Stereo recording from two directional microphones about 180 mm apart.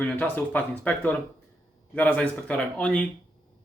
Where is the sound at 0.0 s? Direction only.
10° left (ahead or behind).